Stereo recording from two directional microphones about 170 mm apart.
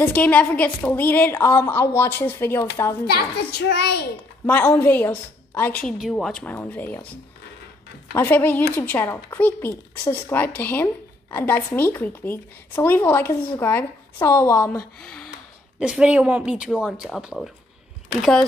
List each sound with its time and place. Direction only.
0.0 s a woman's voice: 10° left (ahead or behind)
3.1 s a child's voice: 70° left (ahead or behind)
4.5 s a woman's voice: 10° left (ahead or behind)
5.8 s a woman's voice: centre (ahead or behind)
15.0 s a sound: 5° left (ahead or behind)
15.8 s speech: 5° right (ahead or behind)